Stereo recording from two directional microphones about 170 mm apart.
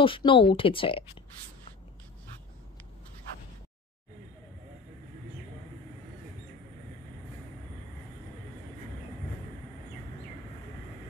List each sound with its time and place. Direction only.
0.0 s speech: 30° left (ahead or behind)